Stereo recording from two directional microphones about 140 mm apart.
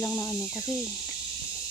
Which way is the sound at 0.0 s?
20° left (ahead or behind).